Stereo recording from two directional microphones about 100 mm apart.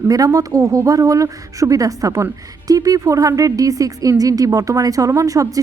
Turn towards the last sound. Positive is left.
turn(degrees=-35)  # may be behind; listen again after turning